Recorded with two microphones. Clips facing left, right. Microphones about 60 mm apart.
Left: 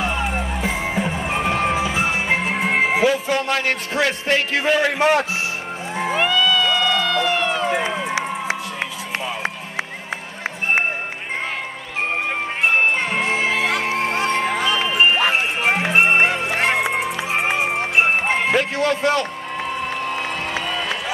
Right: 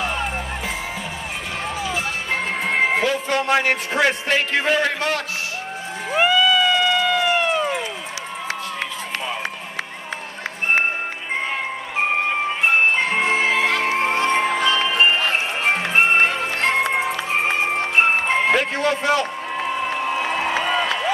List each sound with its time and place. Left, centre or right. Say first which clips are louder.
0.0 s music: left 2 dB; centre
0.6 s music: left 5 dB; left
1.8 s music: left 4 dB; left; by 3.4 s centre
3.4 s a man's voice: right 2 dB; centre
4.9 s a man's voice: left 7 dB; centre
6.1 s run: right 3 dB; centre
7.7 s run: left 5 dB; left
13.1 s music: right 1 dB; centre
14.3 s music: right 1 dB; centre
14.6 s music: even; centre
18.5 s crowd: even; centre